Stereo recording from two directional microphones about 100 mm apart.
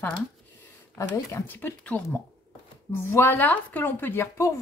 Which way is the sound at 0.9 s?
25° left (ahead or behind).